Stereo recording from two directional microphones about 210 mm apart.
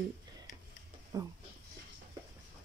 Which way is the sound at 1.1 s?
15° right (ahead or behind).